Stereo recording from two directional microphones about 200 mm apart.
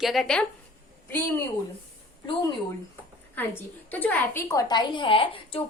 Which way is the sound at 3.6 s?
10° left (ahead or behind).